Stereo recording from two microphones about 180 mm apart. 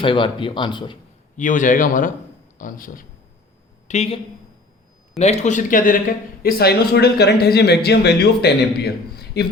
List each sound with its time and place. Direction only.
0.0 s speech: 30° left (ahead or behind)
1.4 s speech: 45° left (ahead or behind)
3.8 s speech: 35° left (ahead or behind)
6.4 s speech: 60° left (ahead or behind)